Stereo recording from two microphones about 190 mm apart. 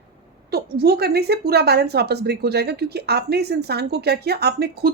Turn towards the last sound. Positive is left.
turn(degrees=-55)  # may be behind; listen again after turning